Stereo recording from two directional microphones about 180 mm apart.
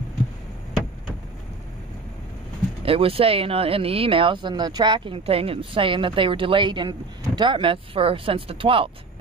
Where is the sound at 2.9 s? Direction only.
30° right (ahead or behind).